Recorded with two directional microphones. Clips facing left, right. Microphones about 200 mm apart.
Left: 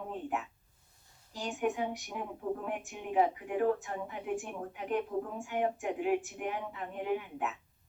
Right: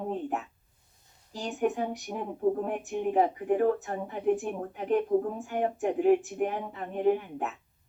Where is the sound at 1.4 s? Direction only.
40° right (ahead or behind).